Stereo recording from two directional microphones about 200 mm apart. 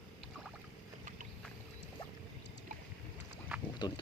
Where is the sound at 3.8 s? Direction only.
20° left (ahead or behind).